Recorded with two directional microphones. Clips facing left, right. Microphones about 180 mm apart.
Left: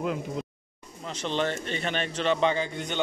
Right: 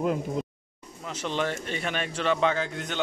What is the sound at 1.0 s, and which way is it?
Speech, 10° right (ahead or behind).